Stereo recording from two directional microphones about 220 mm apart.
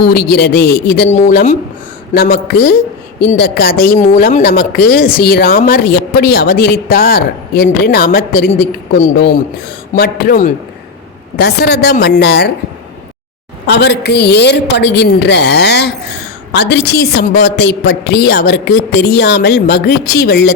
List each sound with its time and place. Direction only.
0.0 s a man's voice: 45° left (ahead or behind)
13.7 s speech: 50° left (ahead or behind)